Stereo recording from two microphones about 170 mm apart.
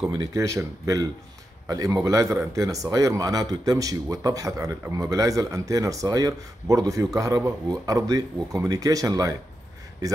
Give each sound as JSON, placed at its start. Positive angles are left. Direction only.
{"t": 0.2, "sound": "speech", "side_deg": -20}